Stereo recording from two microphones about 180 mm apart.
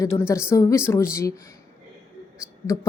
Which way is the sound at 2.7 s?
15° left (ahead or behind).